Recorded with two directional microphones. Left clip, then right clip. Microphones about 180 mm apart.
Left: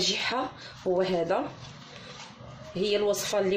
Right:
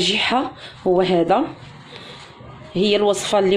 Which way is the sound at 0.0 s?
55° right (ahead or behind).